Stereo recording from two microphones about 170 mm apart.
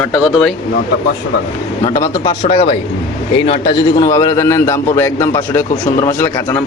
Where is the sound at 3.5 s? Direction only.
30° left (ahead or behind).